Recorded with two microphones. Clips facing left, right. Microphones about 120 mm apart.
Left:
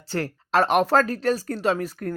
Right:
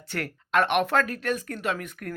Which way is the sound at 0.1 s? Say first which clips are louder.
Left 4 dB; 30° left (ahead or behind).